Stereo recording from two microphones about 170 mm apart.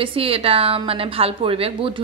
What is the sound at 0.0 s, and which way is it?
A woman's voice, 35° right (ahead or behind).